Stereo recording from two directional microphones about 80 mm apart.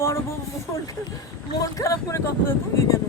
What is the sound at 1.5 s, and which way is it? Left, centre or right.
Speech, left.